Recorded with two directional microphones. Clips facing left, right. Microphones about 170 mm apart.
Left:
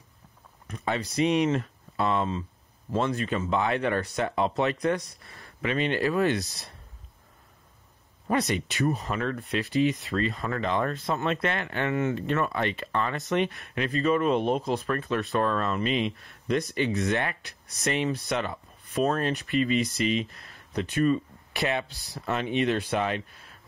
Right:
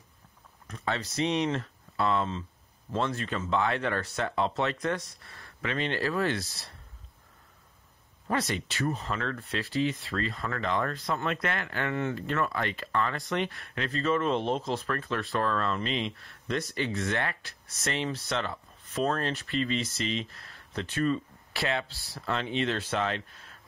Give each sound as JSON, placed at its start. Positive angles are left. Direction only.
{"t": 0.7, "sound": "speech", "side_deg": 15}
{"t": 8.3, "sound": "speech", "side_deg": 15}